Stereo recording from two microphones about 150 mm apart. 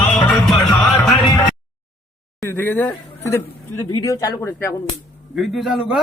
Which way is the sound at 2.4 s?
15° left (ahead or behind).